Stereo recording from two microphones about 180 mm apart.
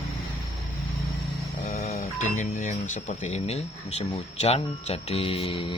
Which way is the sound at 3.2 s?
35° left (ahead or behind).